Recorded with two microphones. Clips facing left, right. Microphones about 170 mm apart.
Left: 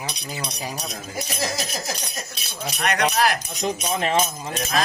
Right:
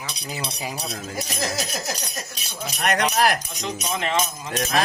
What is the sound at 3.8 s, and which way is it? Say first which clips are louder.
Speech: left 1 dB; 35° left (ahead or behind).